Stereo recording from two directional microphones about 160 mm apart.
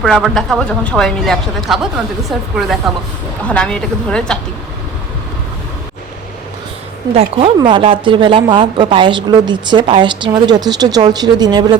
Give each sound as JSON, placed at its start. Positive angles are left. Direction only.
{"t": 0.0, "sound": "speech", "side_deg": 0}
{"t": 7.1, "sound": "a woman's voice", "side_deg": -40}